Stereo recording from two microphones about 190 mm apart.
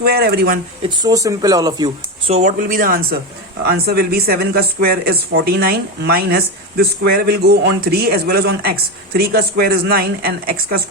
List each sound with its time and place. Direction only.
0.0 s speech: 55° right (ahead or behind)
0.9 s speech: 20° right (ahead or behind)
2.3 s speech: 40° right (ahead or behind)